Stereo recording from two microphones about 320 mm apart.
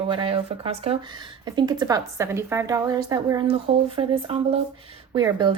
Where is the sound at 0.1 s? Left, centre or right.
Centre.